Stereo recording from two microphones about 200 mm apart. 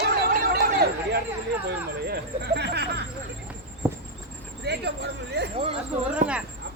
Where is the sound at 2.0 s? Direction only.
50° right (ahead or behind).